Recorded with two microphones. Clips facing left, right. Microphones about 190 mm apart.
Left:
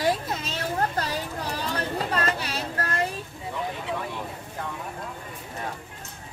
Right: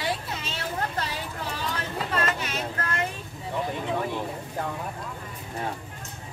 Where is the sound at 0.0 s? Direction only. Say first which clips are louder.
Left 5 dB; 40° left (ahead or behind).